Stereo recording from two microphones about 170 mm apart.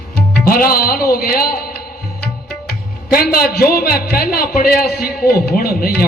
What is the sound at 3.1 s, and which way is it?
Tabla, 60° left (ahead or behind).